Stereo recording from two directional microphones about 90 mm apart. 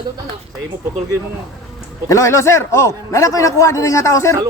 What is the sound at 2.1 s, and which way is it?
A man's voice, 35° left (ahead or behind).